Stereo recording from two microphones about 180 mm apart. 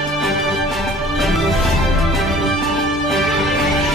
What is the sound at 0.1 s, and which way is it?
Music, centre (ahead or behind).